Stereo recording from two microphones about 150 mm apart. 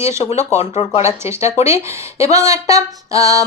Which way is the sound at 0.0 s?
20° right (ahead or behind).